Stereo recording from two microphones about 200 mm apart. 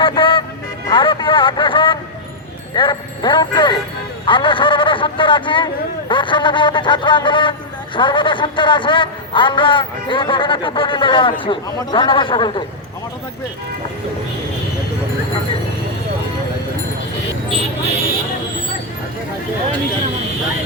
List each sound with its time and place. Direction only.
0.0 s music: 25° left (ahead or behind)
0.9 s a man's voice: 25° left (ahead or behind)